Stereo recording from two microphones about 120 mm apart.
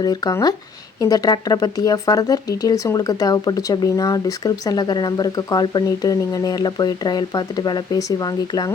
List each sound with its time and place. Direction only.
0.0 s speech: 35° left (ahead or behind)